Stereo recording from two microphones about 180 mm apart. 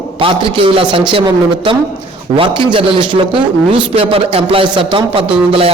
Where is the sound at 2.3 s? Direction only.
30° right (ahead or behind).